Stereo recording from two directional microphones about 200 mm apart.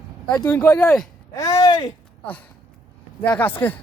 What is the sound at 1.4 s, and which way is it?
Speech, 20° left (ahead or behind).